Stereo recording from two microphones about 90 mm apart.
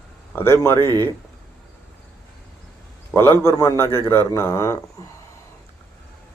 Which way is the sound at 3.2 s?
25° left (ahead or behind).